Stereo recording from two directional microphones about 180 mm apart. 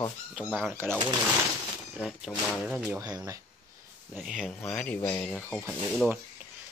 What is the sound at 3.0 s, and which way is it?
Speech, 20° right (ahead or behind).